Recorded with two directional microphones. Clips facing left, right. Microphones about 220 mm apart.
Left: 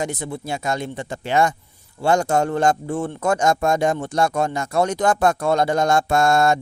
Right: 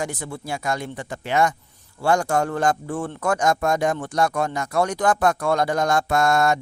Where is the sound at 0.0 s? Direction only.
20° left (ahead or behind).